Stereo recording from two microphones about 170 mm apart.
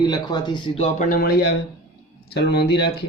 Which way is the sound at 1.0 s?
60° left (ahead or behind).